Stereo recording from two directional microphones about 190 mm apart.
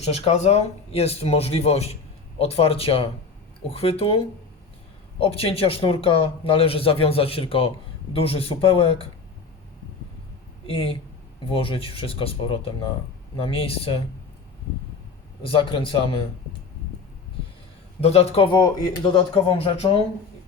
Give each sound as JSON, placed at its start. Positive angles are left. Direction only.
{"t": 0.0, "sound": "speech", "side_deg": 35}
{"t": 5.2, "sound": "speech", "side_deg": 30}
{"t": 10.7, "sound": "speech", "side_deg": 30}
{"t": 15.4, "sound": "speech", "side_deg": 25}
{"t": 18.0, "sound": "speech", "side_deg": 30}